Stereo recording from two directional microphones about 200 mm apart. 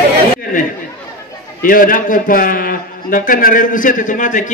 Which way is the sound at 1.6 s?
45° left (ahead or behind).